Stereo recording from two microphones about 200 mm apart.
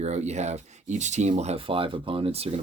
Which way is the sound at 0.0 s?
35° right (ahead or behind).